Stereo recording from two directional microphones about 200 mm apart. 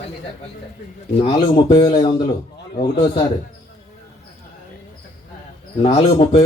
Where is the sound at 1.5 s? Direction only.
20° left (ahead or behind).